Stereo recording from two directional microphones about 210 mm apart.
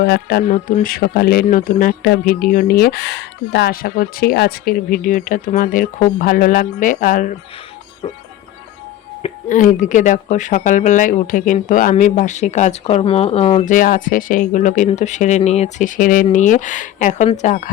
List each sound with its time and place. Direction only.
0.0 s speech: 50° left (ahead or behind)
9.2 s speech: 40° left (ahead or behind)